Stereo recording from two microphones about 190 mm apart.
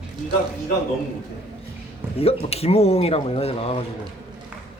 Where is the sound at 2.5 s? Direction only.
30° left (ahead or behind).